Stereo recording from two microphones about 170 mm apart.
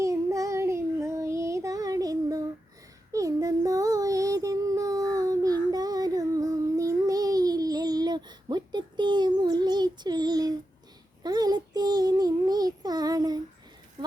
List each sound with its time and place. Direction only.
0.0 s child singing: 20° right (ahead or behind)